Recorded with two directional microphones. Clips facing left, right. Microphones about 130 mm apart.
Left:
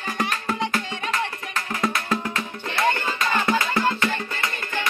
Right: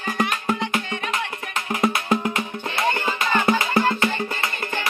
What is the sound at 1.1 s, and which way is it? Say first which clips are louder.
Music: left 1 dB; 20° right (ahead or behind).